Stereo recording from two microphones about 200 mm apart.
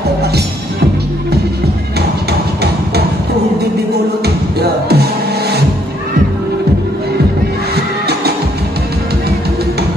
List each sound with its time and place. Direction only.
4.6 s music: 55° right (ahead or behind)
7.7 s music: 55° right (ahead or behind)